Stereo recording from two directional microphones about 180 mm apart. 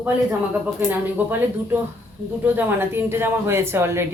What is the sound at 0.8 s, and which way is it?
Speech, 10° right (ahead or behind).